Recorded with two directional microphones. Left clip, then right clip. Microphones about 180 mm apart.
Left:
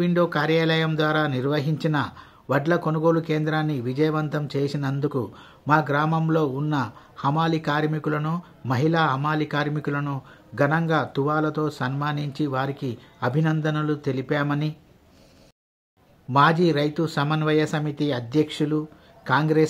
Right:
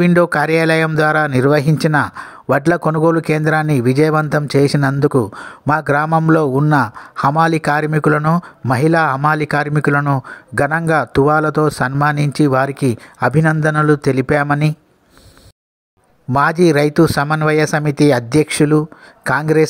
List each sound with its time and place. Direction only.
0.0 s speech: 45° right (ahead or behind)
16.3 s speech: 45° right (ahead or behind)